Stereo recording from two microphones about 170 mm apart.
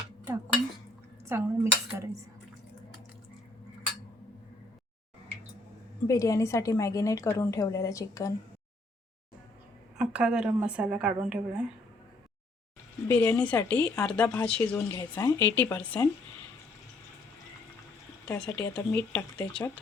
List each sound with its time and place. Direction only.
1.3 s dishes: 15° right (ahead or behind)
6.1 s a woman's voice: 20° left (ahead or behind)
10.0 s a woman's voice: 5° right (ahead or behind)
13.1 s a woman's voice: 10° left (ahead or behind)
18.3 s a woman's voice: 5° left (ahead or behind)